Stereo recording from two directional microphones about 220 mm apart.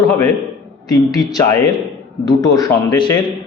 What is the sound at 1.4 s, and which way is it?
A man's voice, 15° left (ahead or behind).